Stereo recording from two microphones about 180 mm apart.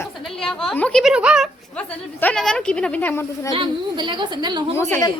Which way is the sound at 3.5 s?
25° right (ahead or behind).